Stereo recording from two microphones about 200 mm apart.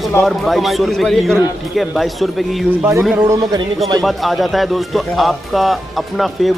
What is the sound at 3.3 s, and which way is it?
Speech, 20° right (ahead or behind).